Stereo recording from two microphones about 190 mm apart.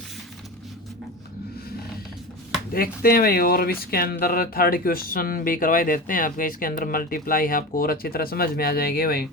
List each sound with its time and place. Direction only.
2.7 s speech: 50° left (ahead or behind)